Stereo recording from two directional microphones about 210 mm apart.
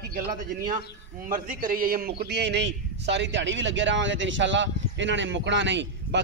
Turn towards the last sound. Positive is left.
turn(degrees=-55)  # may be behind; listen again after turning